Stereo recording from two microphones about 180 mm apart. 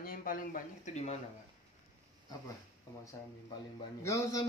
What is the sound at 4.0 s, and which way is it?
Speech, 15° left (ahead or behind).